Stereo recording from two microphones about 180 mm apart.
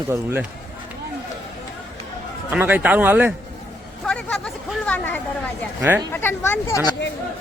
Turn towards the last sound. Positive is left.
turn(degrees=15)  # may be behind; listen again after turning